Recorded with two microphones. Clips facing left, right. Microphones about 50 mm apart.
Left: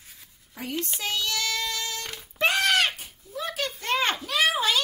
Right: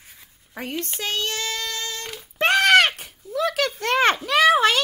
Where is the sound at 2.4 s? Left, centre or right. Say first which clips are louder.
Right 6 dB; right.